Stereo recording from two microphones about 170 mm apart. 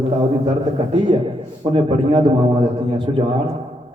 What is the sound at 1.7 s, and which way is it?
A man's voice, 30° right (ahead or behind).